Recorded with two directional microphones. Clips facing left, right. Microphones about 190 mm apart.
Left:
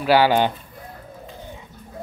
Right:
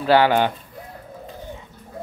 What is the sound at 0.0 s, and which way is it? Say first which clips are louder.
Speech: even; 10° left (ahead or behind).